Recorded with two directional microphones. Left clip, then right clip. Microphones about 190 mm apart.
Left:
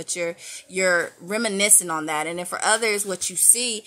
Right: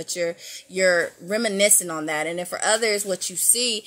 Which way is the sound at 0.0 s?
5° left (ahead or behind).